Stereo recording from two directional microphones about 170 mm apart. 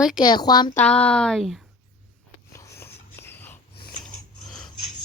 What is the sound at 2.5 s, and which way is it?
Dog, 15° left (ahead or behind).